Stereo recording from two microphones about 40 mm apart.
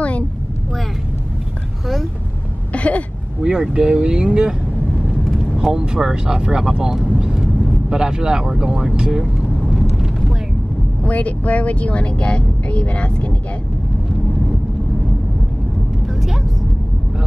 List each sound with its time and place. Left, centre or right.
2.7 s a sound: left
3.7 s speech: right
5.6 s speech: centre
11.1 s speech: left